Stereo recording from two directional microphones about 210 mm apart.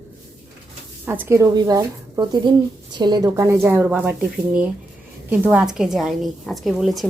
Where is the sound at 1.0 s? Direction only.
10° right (ahead or behind).